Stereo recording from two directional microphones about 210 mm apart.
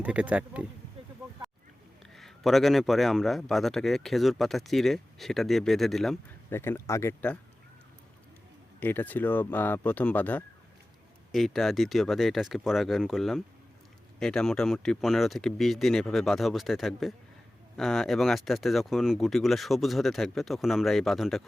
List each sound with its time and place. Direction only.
0.0 s a man's voice: 5° right (ahead or behind)
2.1 s a man's voice: centre (ahead or behind)
8.8 s a man's voice: 10° left (ahead or behind)